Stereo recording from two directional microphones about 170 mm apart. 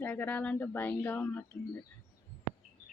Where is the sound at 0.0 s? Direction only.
10° left (ahead or behind).